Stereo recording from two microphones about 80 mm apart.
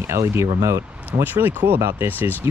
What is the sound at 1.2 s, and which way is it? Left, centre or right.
Speech, right.